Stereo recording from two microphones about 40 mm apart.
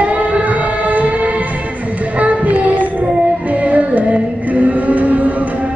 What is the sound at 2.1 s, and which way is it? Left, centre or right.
Child singing, right.